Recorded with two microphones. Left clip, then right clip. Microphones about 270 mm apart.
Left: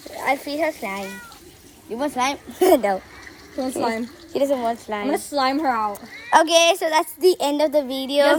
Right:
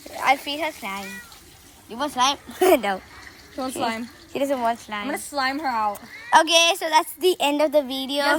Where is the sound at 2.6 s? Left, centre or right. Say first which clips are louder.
Left 3 dB; centre.